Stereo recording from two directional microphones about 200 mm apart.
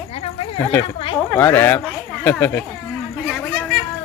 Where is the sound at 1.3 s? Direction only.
10° left (ahead or behind).